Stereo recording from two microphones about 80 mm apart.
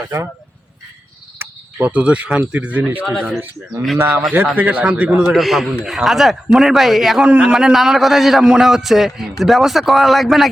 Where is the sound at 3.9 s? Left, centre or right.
Right.